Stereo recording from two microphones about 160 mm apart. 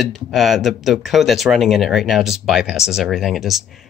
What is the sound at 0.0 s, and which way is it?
Speech, centre (ahead or behind).